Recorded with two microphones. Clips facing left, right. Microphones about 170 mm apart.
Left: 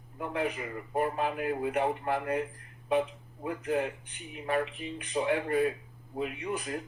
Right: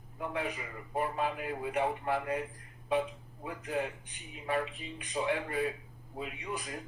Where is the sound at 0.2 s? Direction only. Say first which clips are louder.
Left 4 dB; 50° left (ahead or behind).